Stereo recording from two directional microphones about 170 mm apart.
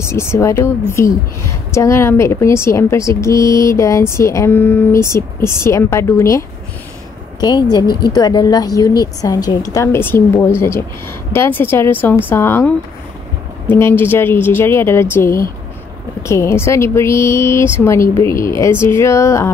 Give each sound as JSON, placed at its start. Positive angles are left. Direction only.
{"t": 0.0, "sound": "a woman's voice", "side_deg": 15}